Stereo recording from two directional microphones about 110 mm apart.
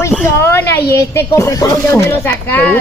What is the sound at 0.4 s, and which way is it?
Speech, 20° left (ahead or behind).